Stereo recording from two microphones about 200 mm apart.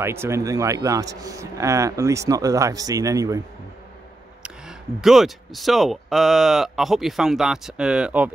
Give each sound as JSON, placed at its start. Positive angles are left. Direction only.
{"t": 0.0, "sound": "a man's voice", "side_deg": -10}
{"t": 4.4, "sound": "speech", "side_deg": -5}